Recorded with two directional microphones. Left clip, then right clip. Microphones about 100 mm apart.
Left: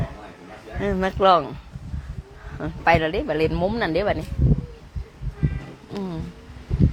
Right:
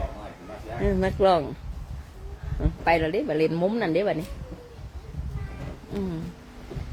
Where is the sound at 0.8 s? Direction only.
15° right (ahead or behind).